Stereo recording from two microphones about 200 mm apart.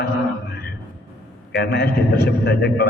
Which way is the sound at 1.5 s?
55° left (ahead or behind).